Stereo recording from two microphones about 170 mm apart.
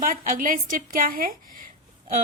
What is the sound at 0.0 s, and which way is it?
A woman's voice, 55° right (ahead or behind).